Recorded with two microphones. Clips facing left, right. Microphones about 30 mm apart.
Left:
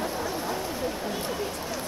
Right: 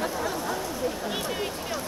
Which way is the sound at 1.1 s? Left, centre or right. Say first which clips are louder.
Right 1 dB; right.